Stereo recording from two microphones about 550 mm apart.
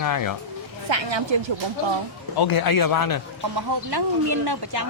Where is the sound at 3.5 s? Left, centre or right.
Right.